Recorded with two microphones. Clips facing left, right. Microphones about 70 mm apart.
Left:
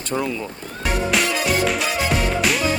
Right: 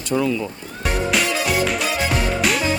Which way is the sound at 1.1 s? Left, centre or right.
Centre.